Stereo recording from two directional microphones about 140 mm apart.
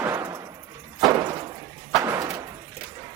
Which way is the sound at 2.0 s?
20° right (ahead or behind).